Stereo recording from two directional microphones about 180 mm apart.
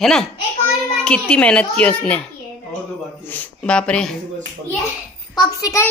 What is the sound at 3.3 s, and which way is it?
Speech, 10° left (ahead or behind).